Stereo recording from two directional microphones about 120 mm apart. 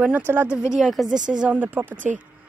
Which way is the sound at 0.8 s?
5° right (ahead or behind).